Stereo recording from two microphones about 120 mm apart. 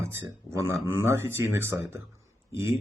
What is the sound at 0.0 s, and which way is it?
A man's voice, 20° right (ahead or behind).